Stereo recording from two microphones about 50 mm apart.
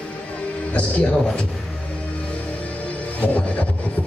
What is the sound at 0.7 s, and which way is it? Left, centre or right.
Music, left.